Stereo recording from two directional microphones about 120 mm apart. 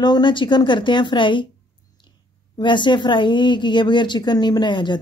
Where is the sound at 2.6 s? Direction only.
40° left (ahead or behind).